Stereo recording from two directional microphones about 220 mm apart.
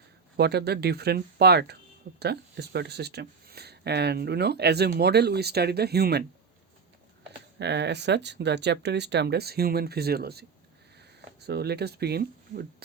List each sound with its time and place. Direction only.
0.3 s speech: 45° right (ahead or behind)
7.6 s speech: 50° right (ahead or behind)